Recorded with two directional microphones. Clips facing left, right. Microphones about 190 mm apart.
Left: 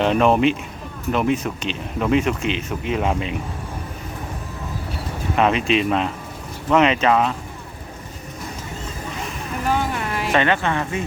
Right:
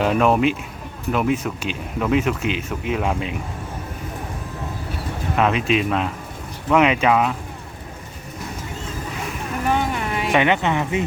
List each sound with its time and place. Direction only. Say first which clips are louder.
0.0 s speech: left 1 dB; 5° right (ahead or behind)
5.4 s speech: left 1 dB; centre (ahead or behind)
9.9 s a sound: right 1 dB; centre (ahead or behind)
10.3 s speech: right 1 dB; 15° right (ahead or behind)